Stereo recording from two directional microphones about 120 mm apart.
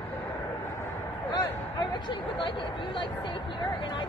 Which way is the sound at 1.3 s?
40° left (ahead or behind).